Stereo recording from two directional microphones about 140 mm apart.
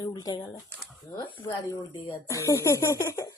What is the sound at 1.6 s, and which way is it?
Speech, 20° left (ahead or behind).